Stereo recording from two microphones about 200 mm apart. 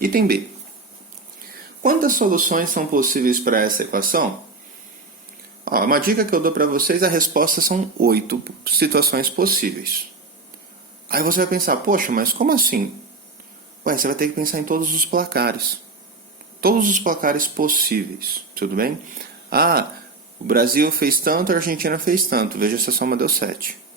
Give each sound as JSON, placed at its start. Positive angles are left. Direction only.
{"t": 0.0, "sound": "speech", "side_deg": -45}
{"t": 1.8, "sound": "speech", "side_deg": -45}
{"t": 5.6, "sound": "speech", "side_deg": -45}
{"t": 11.1, "sound": "speech", "side_deg": -45}
{"t": 13.8, "sound": "speech", "side_deg": -45}
{"t": 16.6, "sound": "speech", "side_deg": -45}